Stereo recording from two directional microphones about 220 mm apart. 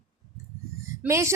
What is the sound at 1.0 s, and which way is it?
Speech, 15° right (ahead or behind).